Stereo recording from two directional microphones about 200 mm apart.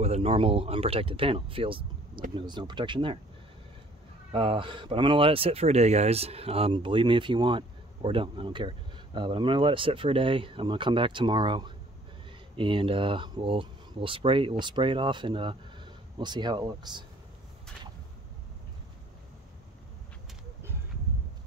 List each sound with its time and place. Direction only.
0.0 s speech: 30° right (ahead or behind)
4.3 s speech: 25° right (ahead or behind)